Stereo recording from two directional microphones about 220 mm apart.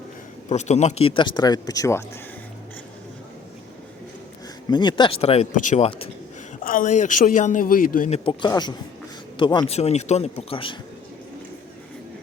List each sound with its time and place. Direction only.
0.4 s speech: 30° left (ahead or behind); by 2.0 s 15° left (ahead or behind)
4.7 s a man's voice: 20° left (ahead or behind)